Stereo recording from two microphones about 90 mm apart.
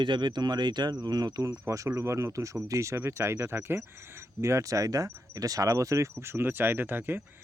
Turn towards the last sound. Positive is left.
turn(degrees=-25)  # may be behind; listen again after turning